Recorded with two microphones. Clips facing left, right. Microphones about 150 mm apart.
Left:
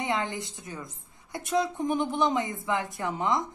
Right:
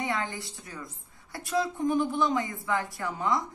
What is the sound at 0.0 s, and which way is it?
A woman's voice, 20° left (ahead or behind).